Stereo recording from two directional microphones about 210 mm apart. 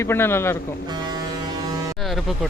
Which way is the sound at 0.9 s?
20° right (ahead or behind).